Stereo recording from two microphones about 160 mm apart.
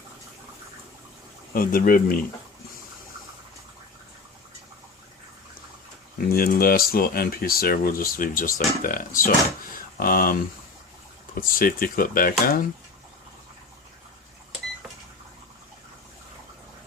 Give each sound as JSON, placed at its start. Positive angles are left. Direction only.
{"t": 1.5, "sound": "speech", "side_deg": 60}
{"t": 6.1, "sound": "speech", "side_deg": 70}